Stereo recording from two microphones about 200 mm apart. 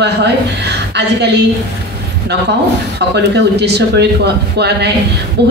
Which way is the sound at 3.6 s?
55° right (ahead or behind).